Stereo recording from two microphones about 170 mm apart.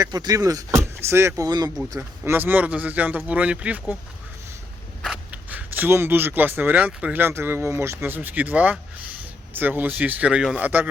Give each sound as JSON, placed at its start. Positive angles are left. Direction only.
{"t": 0.0, "sound": "speech", "side_deg": -25}
{"t": 5.0, "sound": "speech", "side_deg": -5}